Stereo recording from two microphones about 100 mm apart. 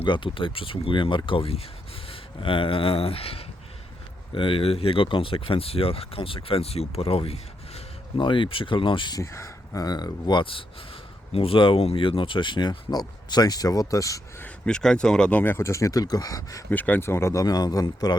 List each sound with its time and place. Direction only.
0.0 s speech: 55° left (ahead or behind); by 1.6 s 75° left (ahead or behind)
2.0 s speech: 60° left (ahead or behind)
4.4 s speech: 65° left (ahead or behind)
8.2 s speech: 55° left (ahead or behind)
9.1 s speech: 30° left (ahead or behind)
14.4 s speech: 10° left (ahead or behind); by 16.6 s 35° left (ahead or behind)
16.6 s speech: 15° left (ahead or behind)
17.4 s speech: 40° left (ahead or behind)